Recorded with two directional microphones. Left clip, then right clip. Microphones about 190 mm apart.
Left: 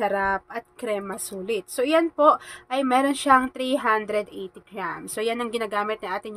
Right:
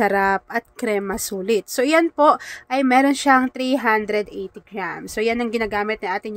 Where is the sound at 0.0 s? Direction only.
40° right (ahead or behind).